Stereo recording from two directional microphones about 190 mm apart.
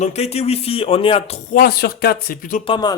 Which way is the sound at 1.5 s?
50° left (ahead or behind).